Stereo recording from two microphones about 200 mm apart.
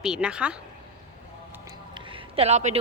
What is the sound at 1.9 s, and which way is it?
Music, 25° right (ahead or behind).